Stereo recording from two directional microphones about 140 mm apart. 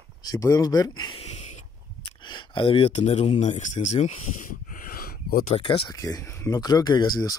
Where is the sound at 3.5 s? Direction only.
60° left (ahead or behind).